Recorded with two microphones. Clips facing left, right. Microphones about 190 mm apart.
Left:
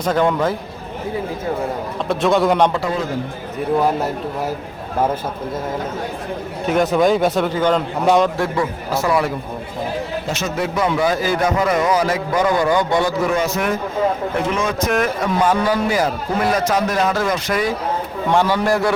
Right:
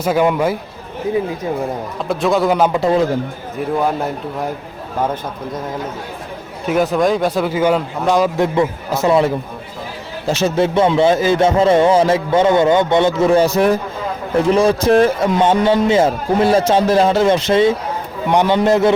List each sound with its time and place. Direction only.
0.0 s a man's voice: 10° right (ahead or behind)
2.0 s speech: centre (ahead or behind)
6.7 s speech: centre (ahead or behind)
8.4 s speech: 20° right (ahead or behind)